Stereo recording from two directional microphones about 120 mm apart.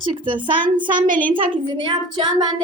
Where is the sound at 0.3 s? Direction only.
40° right (ahead or behind).